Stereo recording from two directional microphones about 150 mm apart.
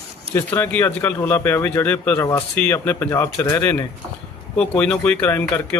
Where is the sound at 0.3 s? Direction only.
15° left (ahead or behind).